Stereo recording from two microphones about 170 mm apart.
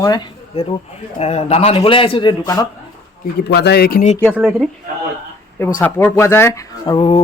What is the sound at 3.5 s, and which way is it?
Speech, 75° left (ahead or behind).